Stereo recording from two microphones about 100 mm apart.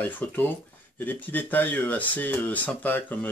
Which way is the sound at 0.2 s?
20° left (ahead or behind).